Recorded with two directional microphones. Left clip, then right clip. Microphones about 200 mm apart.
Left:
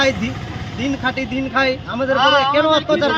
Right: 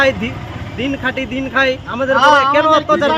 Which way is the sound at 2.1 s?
55° right (ahead or behind).